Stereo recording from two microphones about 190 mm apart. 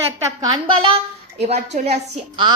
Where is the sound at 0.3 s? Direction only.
25° right (ahead or behind).